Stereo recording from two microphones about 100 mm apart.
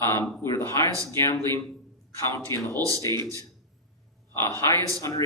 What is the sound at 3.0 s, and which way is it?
Speech, 30° left (ahead or behind).